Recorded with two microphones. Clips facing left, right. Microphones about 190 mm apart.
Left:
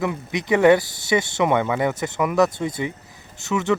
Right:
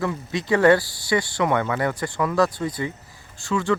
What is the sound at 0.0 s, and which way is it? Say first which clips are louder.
Speech: left 1 dB; 20° left (ahead or behind).